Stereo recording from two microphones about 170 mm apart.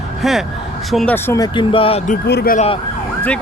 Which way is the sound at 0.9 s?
10° left (ahead or behind).